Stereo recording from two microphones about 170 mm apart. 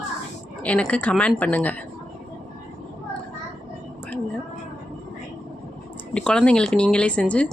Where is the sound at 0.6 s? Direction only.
5° left (ahead or behind).